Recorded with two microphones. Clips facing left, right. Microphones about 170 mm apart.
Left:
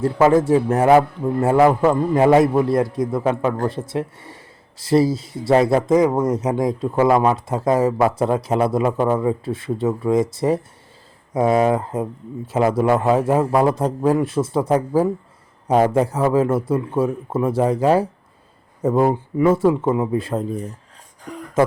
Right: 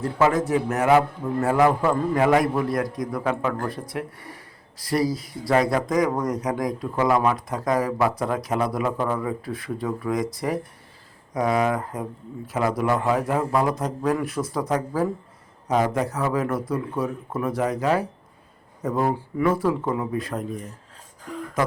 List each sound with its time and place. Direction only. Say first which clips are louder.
0.0 s a man's voice: left 6 dB; 30° left (ahead or behind)